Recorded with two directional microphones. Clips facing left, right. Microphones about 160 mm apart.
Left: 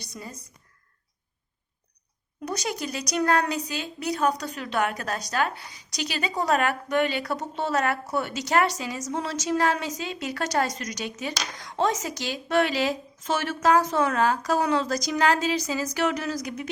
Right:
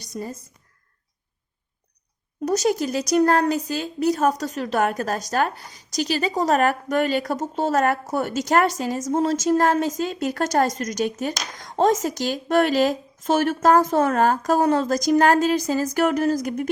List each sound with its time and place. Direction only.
0.0 s speech: 45° right (ahead or behind)
2.4 s a woman's voice: 45° right (ahead or behind)